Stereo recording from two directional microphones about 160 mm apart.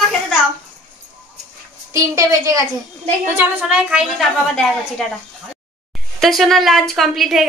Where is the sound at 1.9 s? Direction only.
20° right (ahead or behind).